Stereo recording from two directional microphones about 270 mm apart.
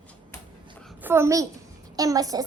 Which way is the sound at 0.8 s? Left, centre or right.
Centre.